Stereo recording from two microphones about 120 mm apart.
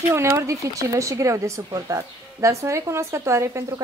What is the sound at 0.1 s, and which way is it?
Speech, 25° right (ahead or behind).